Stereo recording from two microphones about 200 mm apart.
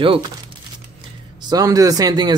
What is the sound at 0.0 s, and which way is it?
Speech, 25° right (ahead or behind).